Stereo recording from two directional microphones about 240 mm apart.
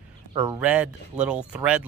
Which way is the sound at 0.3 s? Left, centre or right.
Centre.